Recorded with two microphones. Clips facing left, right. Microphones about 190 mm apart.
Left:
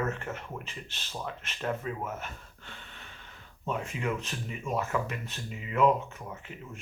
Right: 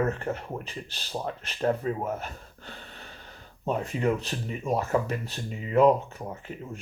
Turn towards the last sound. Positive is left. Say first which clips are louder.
# right 5 dB
turn(degrees=-35)  # may be behind; listen again after turning